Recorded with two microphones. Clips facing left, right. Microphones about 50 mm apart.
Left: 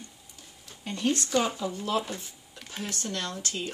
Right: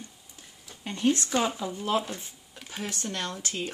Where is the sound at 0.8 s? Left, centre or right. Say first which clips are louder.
Right 2 dB; right.